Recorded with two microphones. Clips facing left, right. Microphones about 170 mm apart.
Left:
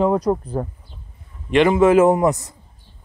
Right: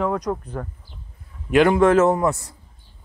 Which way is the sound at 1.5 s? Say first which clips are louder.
Left 1 dB; centre (ahead or behind).